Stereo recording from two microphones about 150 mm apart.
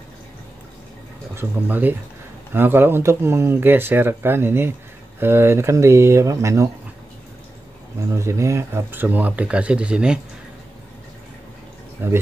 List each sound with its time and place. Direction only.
1.3 s speech: 15° right (ahead or behind)
8.1 s speech: 20° right (ahead or behind)
12.0 s speech: 15° right (ahead or behind)